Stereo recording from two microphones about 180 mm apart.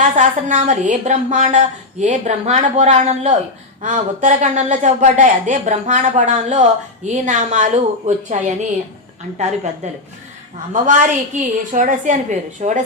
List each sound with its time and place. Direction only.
0.0 s speech: 40° right (ahead or behind)
9.8 s a woman's voice: 40° right (ahead or behind)